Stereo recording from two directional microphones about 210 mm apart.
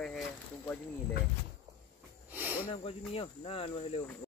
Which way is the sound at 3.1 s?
30° left (ahead or behind).